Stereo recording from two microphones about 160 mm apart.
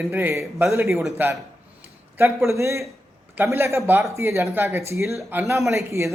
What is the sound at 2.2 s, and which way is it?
A man's voice, 15° right (ahead or behind).